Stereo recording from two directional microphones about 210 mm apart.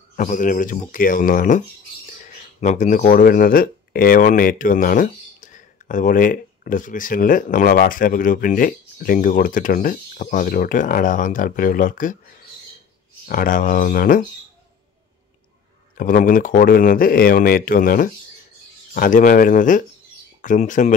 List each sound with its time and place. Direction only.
0.1 s speech: 40° left (ahead or behind)
2.6 s speech: 35° left (ahead or behind)
16.0 s speech: 40° left (ahead or behind)